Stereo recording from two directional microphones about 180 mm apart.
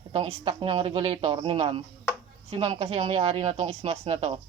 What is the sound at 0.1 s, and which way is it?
Speech, 30° right (ahead or behind).